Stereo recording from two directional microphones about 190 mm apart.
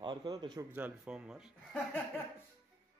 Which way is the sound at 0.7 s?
5° right (ahead or behind).